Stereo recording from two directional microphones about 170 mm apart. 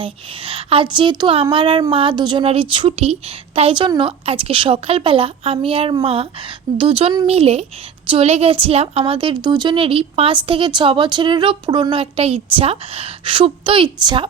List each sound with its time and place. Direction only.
0.0 s speech: 30° right (ahead or behind)